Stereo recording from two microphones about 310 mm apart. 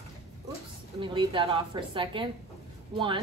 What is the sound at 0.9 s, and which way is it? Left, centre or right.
A woman's voice, centre.